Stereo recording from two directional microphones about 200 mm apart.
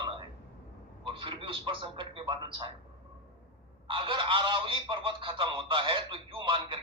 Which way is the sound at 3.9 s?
25° right (ahead or behind).